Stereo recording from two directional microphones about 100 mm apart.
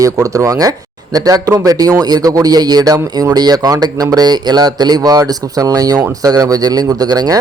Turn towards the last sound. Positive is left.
turn(degrees=-40)  # may be behind; listen again after turning